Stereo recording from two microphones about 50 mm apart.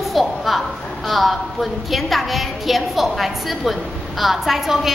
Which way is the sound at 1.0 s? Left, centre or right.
Centre.